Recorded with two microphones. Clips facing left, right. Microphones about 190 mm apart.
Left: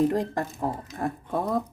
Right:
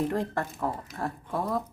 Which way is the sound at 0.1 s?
15° left (ahead or behind).